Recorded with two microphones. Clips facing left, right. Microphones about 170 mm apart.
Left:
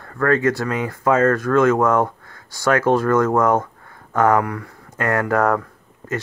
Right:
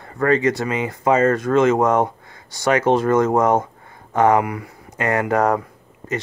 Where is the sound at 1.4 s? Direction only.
20° right (ahead or behind).